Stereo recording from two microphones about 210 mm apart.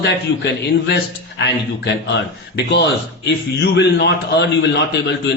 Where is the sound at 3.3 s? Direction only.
55° left (ahead or behind).